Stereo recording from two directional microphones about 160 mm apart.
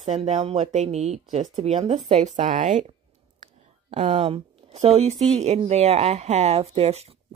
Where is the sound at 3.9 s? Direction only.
35° right (ahead or behind).